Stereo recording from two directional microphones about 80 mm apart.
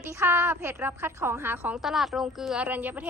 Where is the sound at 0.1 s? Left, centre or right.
Right.